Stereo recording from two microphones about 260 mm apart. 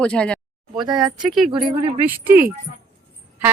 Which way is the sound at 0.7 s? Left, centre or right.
Centre.